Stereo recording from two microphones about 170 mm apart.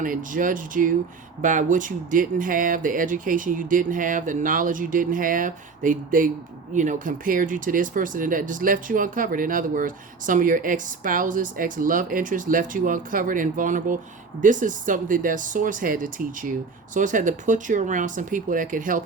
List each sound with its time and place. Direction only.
0.0 s speech: 50° right (ahead or behind)